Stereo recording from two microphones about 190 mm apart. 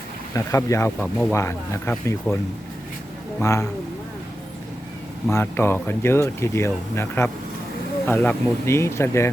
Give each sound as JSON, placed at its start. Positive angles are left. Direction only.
{"t": 0.3, "sound": "speech", "side_deg": 15}
{"t": 3.4, "sound": "speech", "side_deg": 15}
{"t": 5.3, "sound": "speech", "side_deg": 10}